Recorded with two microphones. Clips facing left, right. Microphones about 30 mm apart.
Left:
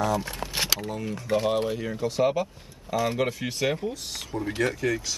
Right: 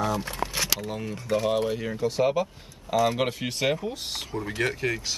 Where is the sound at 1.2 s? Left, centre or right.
Left.